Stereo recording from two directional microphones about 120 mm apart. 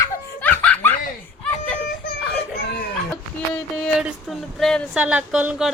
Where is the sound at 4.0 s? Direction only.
10° right (ahead or behind).